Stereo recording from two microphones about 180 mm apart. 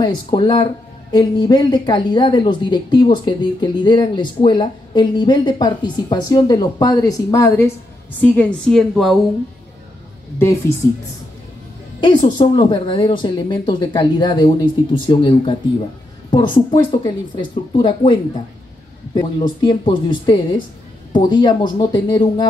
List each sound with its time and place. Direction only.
0.0 s a woman's voice: 25° left (ahead or behind); by 9.1 s centre (ahead or behind)
10.8 s a woman's voice: 15° left (ahead or behind)
16.5 s speech: 25° left (ahead or behind)